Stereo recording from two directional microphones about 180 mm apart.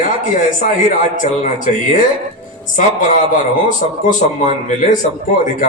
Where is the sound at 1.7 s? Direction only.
45° left (ahead or behind).